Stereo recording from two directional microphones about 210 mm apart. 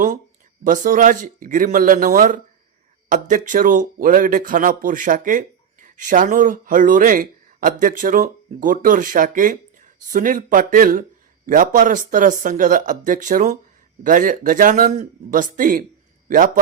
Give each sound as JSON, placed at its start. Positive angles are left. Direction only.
{"t": 0.6, "sound": "speech", "side_deg": -40}